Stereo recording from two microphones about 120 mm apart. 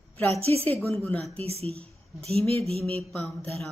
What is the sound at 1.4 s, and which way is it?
Speech, 60° right (ahead or behind).